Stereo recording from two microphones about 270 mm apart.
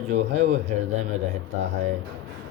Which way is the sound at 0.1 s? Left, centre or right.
Right.